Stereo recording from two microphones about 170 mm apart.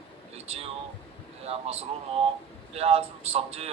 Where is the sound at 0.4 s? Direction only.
35° right (ahead or behind).